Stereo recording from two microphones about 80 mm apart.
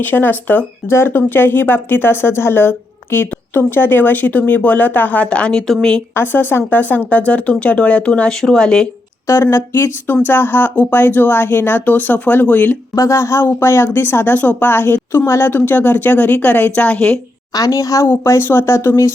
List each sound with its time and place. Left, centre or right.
0.0 s speech: left; by 6.0 s centre
6.1 s speech: left; by 8.9 s centre
9.2 s speech: left
13.0 s speech: left; by 17.2 s centre
17.5 s a woman's voice: left
18.1 s speech: left